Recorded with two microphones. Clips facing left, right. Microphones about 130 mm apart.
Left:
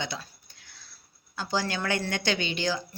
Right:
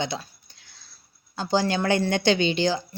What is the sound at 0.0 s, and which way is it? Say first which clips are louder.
Speech: right 6 dB; 25° right (ahead or behind).